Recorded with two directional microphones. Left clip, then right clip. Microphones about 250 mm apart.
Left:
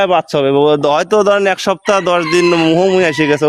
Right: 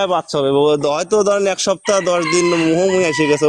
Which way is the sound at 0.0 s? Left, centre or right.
Left.